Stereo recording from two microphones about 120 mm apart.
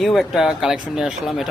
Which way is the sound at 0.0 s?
Centre (ahead or behind).